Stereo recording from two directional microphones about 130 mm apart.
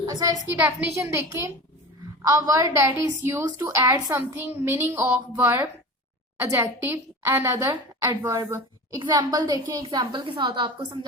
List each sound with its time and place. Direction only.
0.0 s a woman's voice: 25° right (ahead or behind)
8.4 s a sound: 25° right (ahead or behind)
9.0 s a woman's voice: 30° right (ahead or behind)